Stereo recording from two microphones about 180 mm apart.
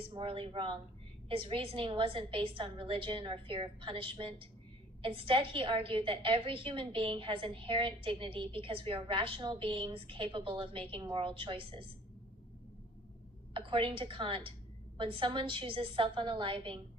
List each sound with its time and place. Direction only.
0.0 s a woman's voice: 30° right (ahead or behind)
13.5 s a woman's voice: 30° right (ahead or behind)